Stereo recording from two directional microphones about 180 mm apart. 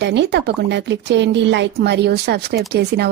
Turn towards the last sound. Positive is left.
turn(degrees=-65)  # may be behind; listen again after turning